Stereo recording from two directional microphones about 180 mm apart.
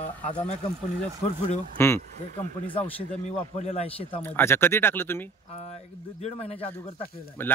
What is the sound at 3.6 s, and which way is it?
Speech, 35° left (ahead or behind).